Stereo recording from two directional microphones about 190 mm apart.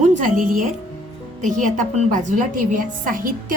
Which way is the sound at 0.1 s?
40° right (ahead or behind).